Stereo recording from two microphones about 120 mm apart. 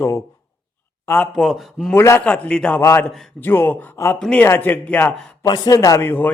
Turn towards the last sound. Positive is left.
turn(degrees=20)  # may be behind; listen again after turning